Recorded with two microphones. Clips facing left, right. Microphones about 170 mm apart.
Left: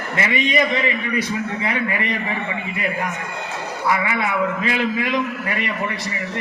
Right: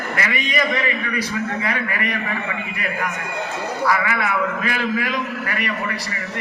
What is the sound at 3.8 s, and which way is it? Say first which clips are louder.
A man's voice: even; 20° left (ahead or behind).